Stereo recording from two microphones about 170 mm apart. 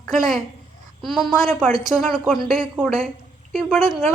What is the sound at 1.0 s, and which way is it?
A woman's voice, centre (ahead or behind).